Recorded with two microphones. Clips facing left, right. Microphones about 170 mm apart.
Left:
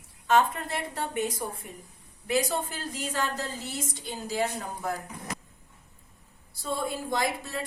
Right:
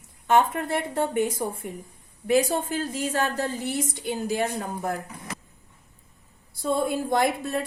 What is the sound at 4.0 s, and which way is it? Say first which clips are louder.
Speech: right 8 dB; 15° right (ahead or behind).